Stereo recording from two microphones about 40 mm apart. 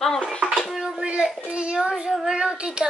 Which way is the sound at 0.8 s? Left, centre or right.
Right.